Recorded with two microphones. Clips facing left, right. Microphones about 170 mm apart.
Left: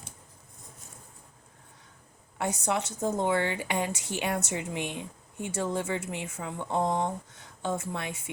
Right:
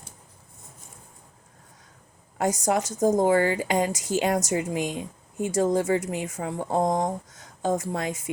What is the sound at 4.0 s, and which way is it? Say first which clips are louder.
Speech: right 9 dB; 90° right.